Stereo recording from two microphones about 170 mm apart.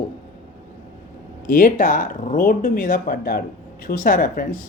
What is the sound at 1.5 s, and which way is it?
Speech, 50° left (ahead or behind).